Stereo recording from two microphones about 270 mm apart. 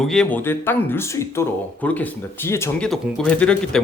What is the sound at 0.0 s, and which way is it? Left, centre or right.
Speech, centre.